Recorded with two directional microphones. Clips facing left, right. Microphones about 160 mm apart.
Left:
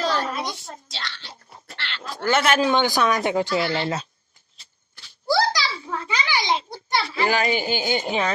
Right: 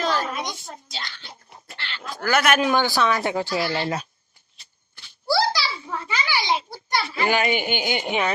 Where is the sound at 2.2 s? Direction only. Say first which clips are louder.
Left 1 dB; 25° left (ahead or behind).